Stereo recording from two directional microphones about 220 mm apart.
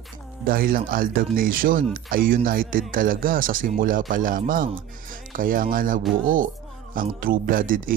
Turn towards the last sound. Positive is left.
turn(degrees=-40)  # may be behind; listen again after turning